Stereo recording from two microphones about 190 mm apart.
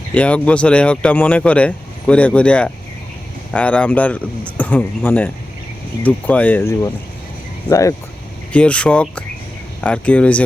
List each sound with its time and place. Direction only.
0.1 s speech: 5° left (ahead or behind)
8.5 s speech: 5° left (ahead or behind)